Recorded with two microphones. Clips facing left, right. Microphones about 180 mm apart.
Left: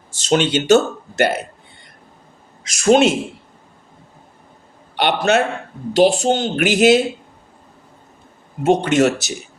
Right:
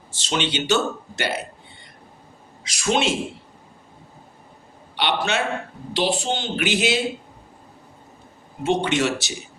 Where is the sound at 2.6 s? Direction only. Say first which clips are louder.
Left 9 dB; 45° left (ahead or behind).